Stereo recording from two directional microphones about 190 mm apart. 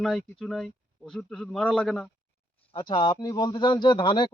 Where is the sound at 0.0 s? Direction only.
Centre (ahead or behind).